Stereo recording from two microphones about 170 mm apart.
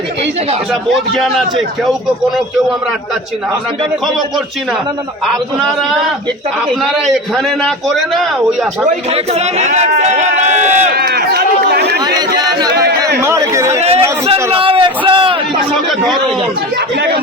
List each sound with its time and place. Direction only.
0.7 s a man's voice: centre (ahead or behind)
5.2 s a man's voice: centre (ahead or behind)
8.9 s a man's voice: 35° right (ahead or behind)
10.9 s run: 70° right (ahead or behind)
12.0 s chatter: 25° right (ahead or behind)
13.2 s speech: 15° right (ahead or behind)
13.8 s a sound: 35° right (ahead or behind)
14.5 s a man's voice: 30° right (ahead or behind)